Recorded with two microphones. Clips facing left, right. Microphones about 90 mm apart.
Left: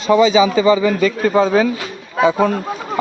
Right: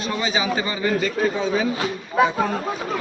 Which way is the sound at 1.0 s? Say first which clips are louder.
Left 8 dB; 85° left.